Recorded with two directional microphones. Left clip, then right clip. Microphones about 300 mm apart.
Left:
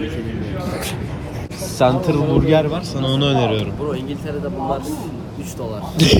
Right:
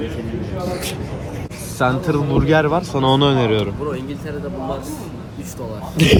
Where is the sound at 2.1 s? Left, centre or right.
Centre.